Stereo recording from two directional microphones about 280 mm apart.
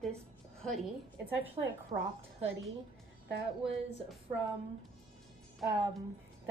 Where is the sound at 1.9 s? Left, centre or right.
Right.